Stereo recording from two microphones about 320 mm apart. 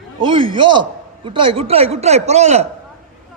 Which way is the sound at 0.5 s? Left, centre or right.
Centre.